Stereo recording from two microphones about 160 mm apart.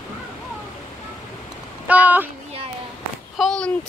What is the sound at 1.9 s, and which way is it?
Speech, 10° right (ahead or behind).